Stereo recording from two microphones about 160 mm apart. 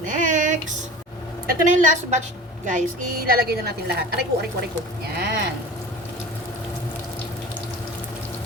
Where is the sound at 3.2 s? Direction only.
75° right (ahead or behind).